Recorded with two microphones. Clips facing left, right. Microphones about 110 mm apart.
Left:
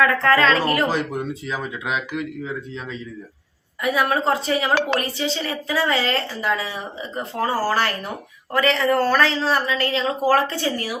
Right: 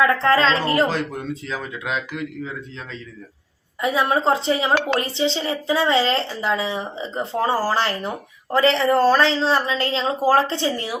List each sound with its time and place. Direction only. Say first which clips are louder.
0.0 s a woman's voice: even; 25° right (ahead or behind)
0.9 s speech: left 1 dB; 5° left (ahead or behind)
3.8 s a woman's voice: right 1 dB; 25° right (ahead or behind)